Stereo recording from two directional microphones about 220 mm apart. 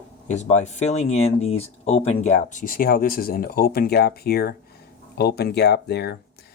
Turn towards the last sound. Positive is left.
turn(degrees=50)  # may be behind; listen again after turning